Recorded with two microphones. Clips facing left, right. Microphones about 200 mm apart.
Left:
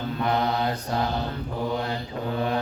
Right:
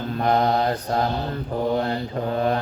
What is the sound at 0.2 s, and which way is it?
Mantra, 45° right (ahead or behind).